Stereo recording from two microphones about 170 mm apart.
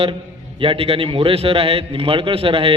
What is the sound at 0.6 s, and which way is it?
A man's voice, 35° right (ahead or behind).